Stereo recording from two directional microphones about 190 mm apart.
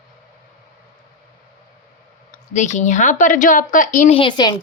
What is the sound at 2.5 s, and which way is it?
A woman's voice, 40° left (ahead or behind).